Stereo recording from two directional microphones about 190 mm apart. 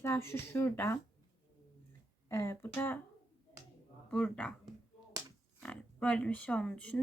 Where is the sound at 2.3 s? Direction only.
15° left (ahead or behind).